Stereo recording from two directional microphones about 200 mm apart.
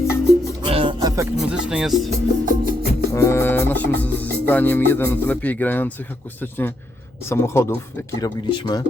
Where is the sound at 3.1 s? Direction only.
15° left (ahead or behind).